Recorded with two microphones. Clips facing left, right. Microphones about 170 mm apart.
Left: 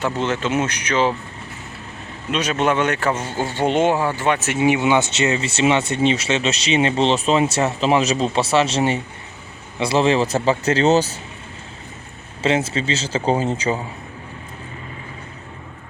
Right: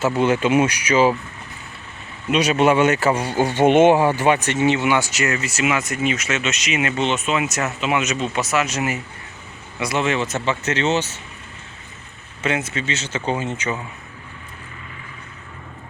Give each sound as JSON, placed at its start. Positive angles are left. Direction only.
{"t": 0.0, "sound": "speech", "side_deg": -10}
{"t": 2.3, "sound": "speech", "side_deg": -10}
{"t": 4.3, "sound": "speech", "side_deg": 5}
{"t": 12.4, "sound": "speech", "side_deg": 30}